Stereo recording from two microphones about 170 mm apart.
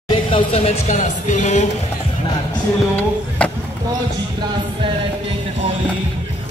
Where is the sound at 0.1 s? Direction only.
35° left (ahead or behind).